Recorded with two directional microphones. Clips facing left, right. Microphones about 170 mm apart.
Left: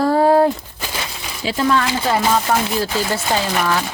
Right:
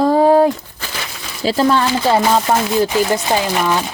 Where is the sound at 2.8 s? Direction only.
15° right (ahead or behind).